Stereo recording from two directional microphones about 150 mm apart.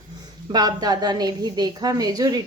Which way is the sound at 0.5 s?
25° right (ahead or behind).